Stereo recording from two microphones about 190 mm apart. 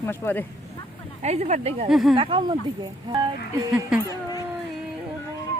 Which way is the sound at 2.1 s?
25° right (ahead or behind).